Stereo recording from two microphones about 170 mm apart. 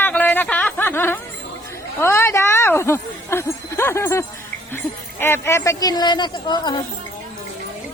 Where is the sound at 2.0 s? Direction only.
15° left (ahead or behind).